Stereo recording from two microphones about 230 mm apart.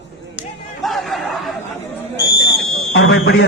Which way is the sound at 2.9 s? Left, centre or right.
Left.